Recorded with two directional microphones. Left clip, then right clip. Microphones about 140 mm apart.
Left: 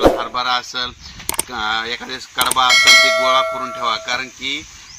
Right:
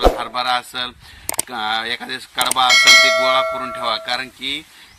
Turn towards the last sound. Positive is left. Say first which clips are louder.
# left 1 dB
turn(degrees=-45)  # may be behind; listen again after turning